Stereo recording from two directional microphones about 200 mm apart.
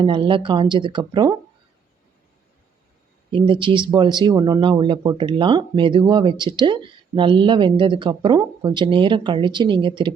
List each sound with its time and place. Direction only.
0.0 s speech: 25° right (ahead or behind)
3.3 s speech: 25° right (ahead or behind)